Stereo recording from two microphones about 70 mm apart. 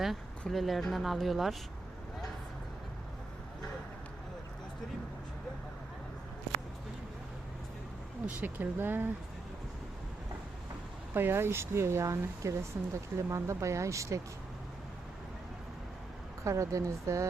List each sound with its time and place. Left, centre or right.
0.0 s speech: centre
8.4 s speech: right
11.1 s speech: right
16.4 s speech: right